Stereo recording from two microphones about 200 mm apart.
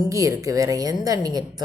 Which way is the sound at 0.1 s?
15° right (ahead or behind).